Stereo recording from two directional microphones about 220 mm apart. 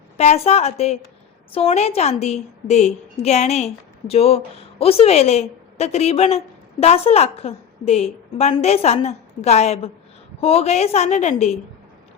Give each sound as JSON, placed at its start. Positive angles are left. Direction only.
{"t": 0.2, "sound": "a woman's voice", "side_deg": 30}